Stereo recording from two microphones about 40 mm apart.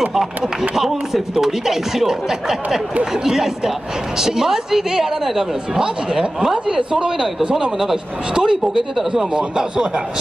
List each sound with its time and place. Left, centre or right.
0.7 s speech: centre
8.4 s speech: centre
8.9 s speech: centre